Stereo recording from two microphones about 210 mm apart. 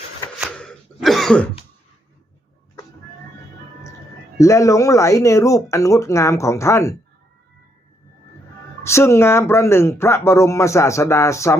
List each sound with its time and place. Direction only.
0.3 s throat clearing: centre (ahead or behind)
4.4 s speech: 15° left (ahead or behind)
8.8 s speech: 15° left (ahead or behind)